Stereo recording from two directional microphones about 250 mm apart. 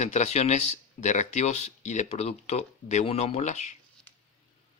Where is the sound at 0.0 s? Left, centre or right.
Left.